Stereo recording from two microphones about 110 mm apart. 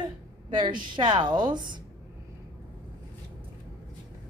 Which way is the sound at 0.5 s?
45° right (ahead or behind).